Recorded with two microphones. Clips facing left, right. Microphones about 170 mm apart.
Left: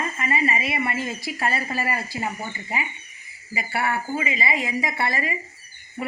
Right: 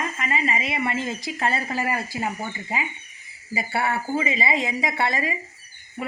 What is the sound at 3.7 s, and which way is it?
A woman's voice, 25° right (ahead or behind).